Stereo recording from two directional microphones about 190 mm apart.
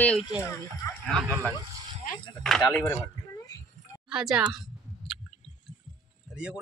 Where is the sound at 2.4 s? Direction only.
Centre (ahead or behind).